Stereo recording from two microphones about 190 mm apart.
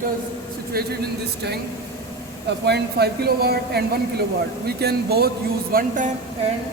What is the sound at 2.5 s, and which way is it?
Speech, 60° right (ahead or behind).